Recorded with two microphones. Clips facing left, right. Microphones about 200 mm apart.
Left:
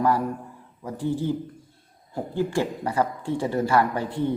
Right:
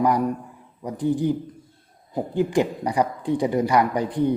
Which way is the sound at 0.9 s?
15° right (ahead or behind).